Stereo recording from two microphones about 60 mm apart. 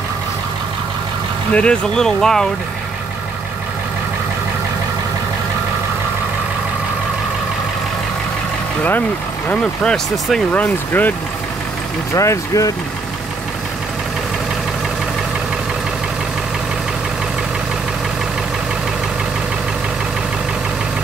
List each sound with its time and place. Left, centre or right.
1.5 s speech: centre
10.9 s speech: left
12.1 s speech: left